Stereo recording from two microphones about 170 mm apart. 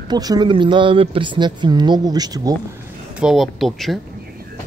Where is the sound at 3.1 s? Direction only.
Centre (ahead or behind).